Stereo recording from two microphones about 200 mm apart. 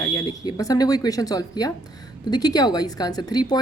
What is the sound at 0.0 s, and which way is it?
A woman's voice, 20° left (ahead or behind).